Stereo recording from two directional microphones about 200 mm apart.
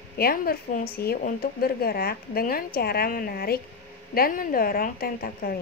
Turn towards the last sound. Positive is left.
turn(degrees=50)  # may be behind; listen again after turning